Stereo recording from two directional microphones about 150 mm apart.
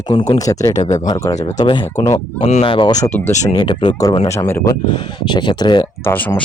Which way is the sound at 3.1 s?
15° left (ahead or behind).